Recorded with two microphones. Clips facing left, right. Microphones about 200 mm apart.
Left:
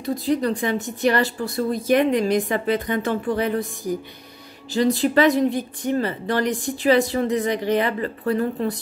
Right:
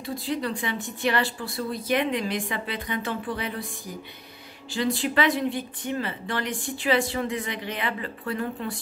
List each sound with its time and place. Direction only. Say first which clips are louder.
0.0 s a woman's voice: left 7 dB; 40° left (ahead or behind)
4.7 s speech: left 7 dB; 40° left (ahead or behind)